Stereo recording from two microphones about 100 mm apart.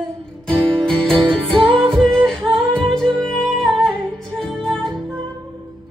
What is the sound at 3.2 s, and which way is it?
Music, 5° left (ahead or behind).